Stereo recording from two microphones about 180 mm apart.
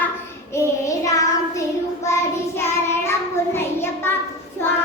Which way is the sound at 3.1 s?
15° left (ahead or behind).